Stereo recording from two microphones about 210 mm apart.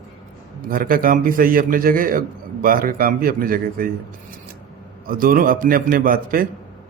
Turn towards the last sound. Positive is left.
turn(degrees=-45)  # may be behind; listen again after turning